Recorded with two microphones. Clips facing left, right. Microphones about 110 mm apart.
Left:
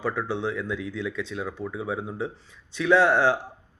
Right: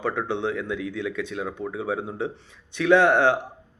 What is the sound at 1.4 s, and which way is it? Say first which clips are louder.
Speech: right 2 dB; 25° right (ahead or behind).